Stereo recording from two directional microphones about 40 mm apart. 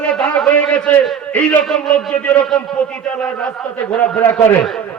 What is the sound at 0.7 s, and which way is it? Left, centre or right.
Speech, left.